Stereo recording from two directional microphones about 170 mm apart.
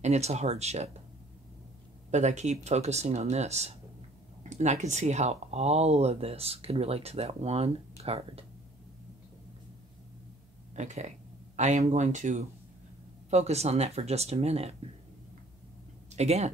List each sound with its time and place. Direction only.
0.0 s speech: 40° right (ahead or behind)
2.0 s speech: 45° right (ahead or behind)
10.7 s a sound: 45° right (ahead or behind)
11.9 s speech: 45° right (ahead or behind)
16.2 s speech: 40° right (ahead or behind)